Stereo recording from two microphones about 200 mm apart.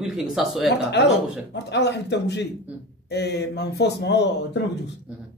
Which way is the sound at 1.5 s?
60° left (ahead or behind).